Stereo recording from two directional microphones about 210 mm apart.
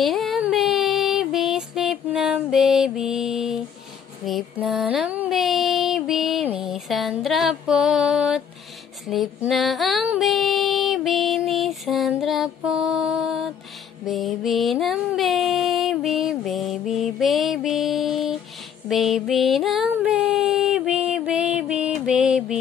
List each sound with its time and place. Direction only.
0.0 s female singing: centre (ahead or behind)